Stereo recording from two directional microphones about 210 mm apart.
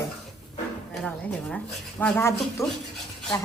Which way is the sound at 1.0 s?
5° left (ahead or behind).